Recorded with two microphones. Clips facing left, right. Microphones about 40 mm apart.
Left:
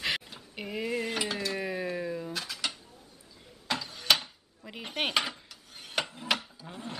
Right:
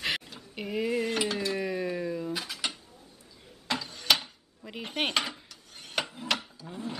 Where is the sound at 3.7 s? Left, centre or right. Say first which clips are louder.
Even; centre.